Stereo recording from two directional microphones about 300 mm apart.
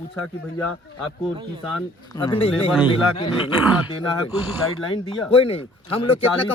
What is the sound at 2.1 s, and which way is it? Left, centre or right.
Speech, centre.